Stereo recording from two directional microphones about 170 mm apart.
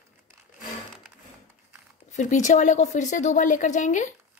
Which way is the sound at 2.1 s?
45° left (ahead or behind).